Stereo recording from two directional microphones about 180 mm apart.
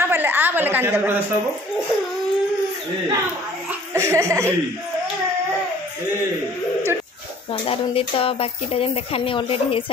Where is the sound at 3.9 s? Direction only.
15° right (ahead or behind).